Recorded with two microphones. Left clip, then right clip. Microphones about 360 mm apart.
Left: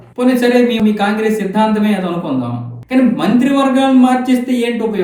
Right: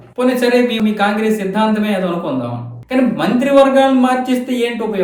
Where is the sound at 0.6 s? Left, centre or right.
Centre.